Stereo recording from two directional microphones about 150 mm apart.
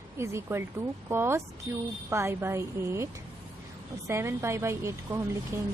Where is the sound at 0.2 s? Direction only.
15° right (ahead or behind).